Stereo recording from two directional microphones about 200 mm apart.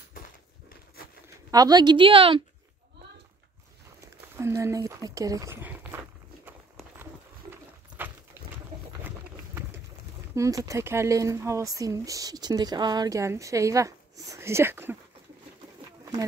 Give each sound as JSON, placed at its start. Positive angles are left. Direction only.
{"t": 1.5, "sound": "a woman's voice", "side_deg": -20}
{"t": 4.4, "sound": "a sound", "side_deg": -15}
{"t": 10.3, "sound": "speech", "side_deg": -15}